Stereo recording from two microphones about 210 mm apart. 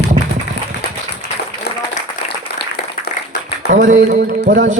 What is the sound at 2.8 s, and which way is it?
Applause, 50° left (ahead or behind).